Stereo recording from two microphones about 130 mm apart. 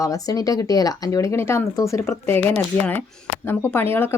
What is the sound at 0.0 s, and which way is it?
Speech, 25° left (ahead or behind).